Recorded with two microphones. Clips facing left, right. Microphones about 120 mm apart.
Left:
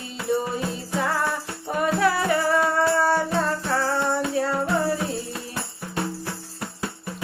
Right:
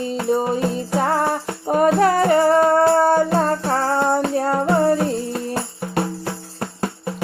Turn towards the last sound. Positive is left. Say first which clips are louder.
# right 7 dB
turn(degrees=-50)  # may be behind; listen again after turning